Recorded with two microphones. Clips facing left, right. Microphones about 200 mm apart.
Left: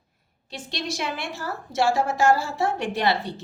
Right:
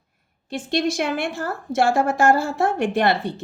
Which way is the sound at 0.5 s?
50° right (ahead or behind).